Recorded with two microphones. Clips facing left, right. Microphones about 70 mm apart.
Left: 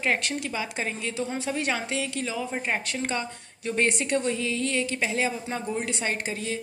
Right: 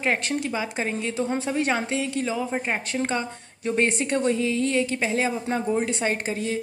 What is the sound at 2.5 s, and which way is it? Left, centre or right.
A woman's voice, right.